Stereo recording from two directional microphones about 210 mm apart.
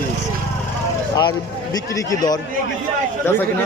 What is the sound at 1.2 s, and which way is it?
Speech, 20° left (ahead or behind).